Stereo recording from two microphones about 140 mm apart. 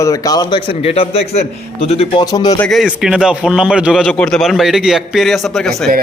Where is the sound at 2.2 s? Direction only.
25° left (ahead or behind).